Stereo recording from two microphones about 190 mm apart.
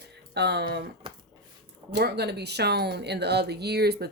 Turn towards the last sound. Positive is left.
turn(degrees=-55)  # may be behind; listen again after turning